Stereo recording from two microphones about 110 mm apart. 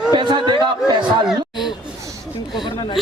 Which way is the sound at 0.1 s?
45° right (ahead or behind).